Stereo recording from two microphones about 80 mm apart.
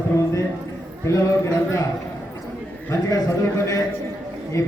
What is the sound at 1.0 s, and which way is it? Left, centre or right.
Speech, left.